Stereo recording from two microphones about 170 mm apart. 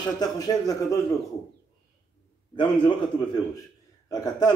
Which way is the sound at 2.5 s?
25° left (ahead or behind).